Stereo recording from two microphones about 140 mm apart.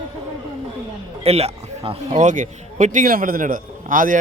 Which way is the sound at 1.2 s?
45° right (ahead or behind).